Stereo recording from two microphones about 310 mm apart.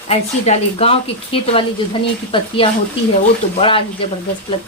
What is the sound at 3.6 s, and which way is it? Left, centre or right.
Speech, centre.